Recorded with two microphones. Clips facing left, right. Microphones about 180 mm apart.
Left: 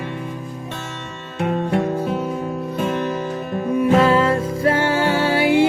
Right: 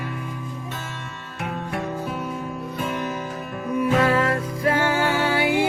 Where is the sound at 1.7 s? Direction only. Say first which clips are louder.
Left 8 dB; 30° left (ahead or behind).